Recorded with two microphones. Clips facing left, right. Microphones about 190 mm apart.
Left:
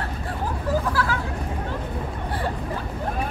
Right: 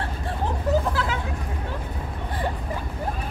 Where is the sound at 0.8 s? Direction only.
20° right (ahead or behind).